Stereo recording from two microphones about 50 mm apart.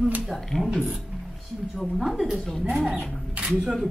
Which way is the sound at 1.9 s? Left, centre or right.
Centre.